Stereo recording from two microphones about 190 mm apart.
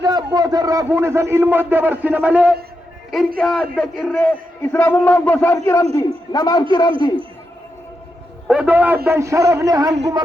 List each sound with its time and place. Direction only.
0.0 s a man's voice: 20° right (ahead or behind); by 7.2 s 20° left (ahead or behind)
8.4 s a man's voice: 5° right (ahead or behind)